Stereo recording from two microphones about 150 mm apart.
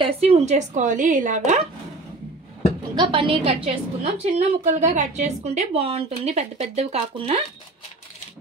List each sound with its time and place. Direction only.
0.0 s a woman's voice: 40° right (ahead or behind)
3.0 s a woman's voice: 35° right (ahead or behind)